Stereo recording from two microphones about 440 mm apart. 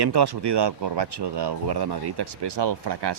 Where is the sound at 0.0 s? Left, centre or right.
Right.